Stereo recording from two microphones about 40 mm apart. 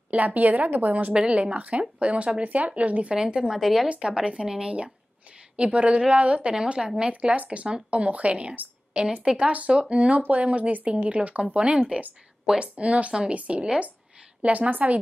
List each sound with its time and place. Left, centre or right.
0.1 s a woman's voice: right
1.1 s speech: right
3.2 s speech: centre
4.1 s a woman's voice: right
9.5 s a woman's voice: right